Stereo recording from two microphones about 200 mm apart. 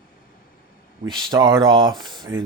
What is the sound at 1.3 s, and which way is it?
Speech, 20° right (ahead or behind).